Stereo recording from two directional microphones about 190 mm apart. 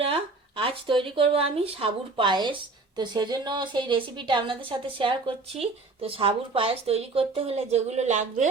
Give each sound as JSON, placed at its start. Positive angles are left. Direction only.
{"t": 0.0, "sound": "speech", "side_deg": -30}